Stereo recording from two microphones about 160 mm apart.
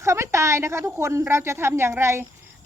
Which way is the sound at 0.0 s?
15° right (ahead or behind).